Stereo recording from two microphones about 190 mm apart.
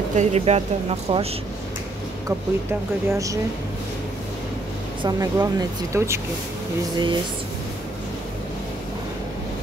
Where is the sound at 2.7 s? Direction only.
15° right (ahead or behind).